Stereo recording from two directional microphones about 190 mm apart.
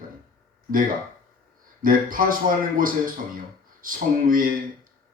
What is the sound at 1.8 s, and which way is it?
A man's voice, 50° right (ahead or behind).